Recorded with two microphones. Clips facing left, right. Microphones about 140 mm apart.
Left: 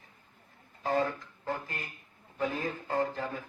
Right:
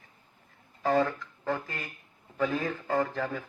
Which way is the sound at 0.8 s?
90° right.